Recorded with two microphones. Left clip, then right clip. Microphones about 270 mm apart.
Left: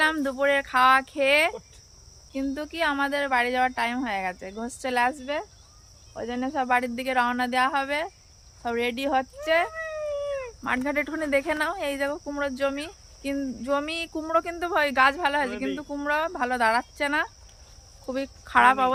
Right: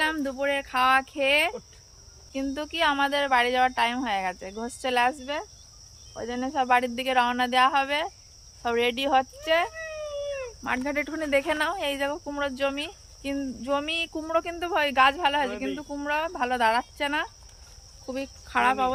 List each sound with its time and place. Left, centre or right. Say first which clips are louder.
0.0 s speech: left 3 dB; centre
9.7 s dog: left 3 dB; centre
10.6 s speech: left 2 dB; centre